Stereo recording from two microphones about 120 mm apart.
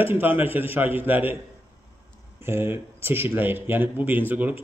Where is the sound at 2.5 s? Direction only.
20° right (ahead or behind).